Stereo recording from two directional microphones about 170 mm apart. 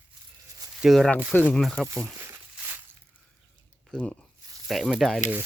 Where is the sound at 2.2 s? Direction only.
15° right (ahead or behind).